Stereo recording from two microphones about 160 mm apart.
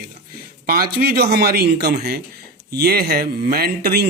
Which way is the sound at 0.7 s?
70° right (ahead or behind).